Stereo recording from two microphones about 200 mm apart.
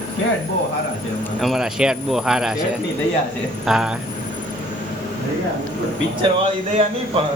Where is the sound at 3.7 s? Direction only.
Centre (ahead or behind).